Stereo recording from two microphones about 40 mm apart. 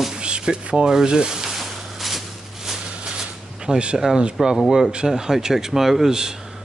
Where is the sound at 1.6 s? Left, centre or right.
Centre; by 4.0 s right.